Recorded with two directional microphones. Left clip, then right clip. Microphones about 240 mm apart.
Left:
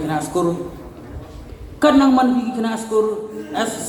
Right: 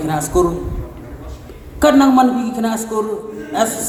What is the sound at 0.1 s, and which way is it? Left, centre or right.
Speech, right.